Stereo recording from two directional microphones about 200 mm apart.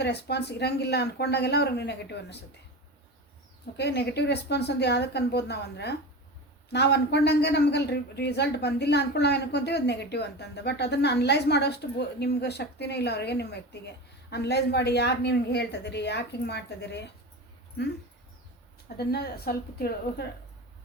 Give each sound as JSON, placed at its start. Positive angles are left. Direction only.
{"t": 0.0, "sound": "speech", "side_deg": 55}
{"t": 3.8, "sound": "speech", "side_deg": 55}
{"t": 18.9, "sound": "a woman's voice", "side_deg": 50}